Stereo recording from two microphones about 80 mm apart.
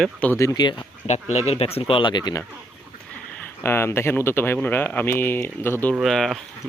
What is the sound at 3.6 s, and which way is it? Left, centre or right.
Speech, left.